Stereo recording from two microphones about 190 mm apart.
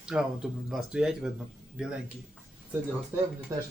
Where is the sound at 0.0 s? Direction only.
5° right (ahead or behind).